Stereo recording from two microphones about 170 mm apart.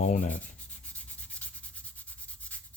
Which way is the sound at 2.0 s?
10° left (ahead or behind).